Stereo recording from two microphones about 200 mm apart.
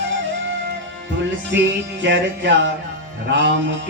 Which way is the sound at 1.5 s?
65° right (ahead or behind).